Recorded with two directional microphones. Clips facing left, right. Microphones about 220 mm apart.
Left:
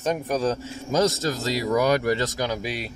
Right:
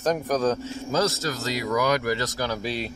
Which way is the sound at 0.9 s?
25° left (ahead or behind).